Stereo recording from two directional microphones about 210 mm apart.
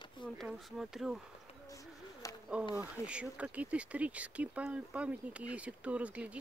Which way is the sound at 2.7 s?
5° right (ahead or behind).